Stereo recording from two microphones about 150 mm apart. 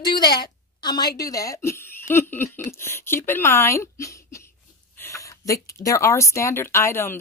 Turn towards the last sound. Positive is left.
turn(degrees=15)  # may be behind; listen again after turning